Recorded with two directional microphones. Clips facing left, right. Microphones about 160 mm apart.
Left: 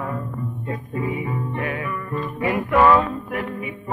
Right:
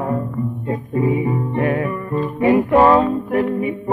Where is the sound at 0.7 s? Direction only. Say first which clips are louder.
Right 8 dB; 35° right (ahead or behind).